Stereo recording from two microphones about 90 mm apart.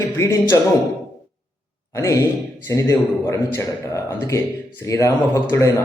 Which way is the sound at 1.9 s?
35° left (ahead or behind).